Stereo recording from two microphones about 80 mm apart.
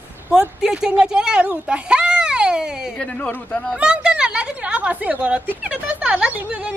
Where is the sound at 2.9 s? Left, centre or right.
Centre.